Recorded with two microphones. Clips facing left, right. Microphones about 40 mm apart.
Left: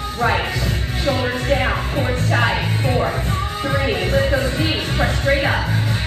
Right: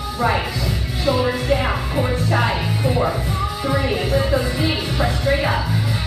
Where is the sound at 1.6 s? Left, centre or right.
Centre.